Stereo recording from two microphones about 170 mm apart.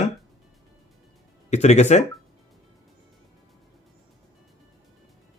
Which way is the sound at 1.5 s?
40° left (ahead or behind).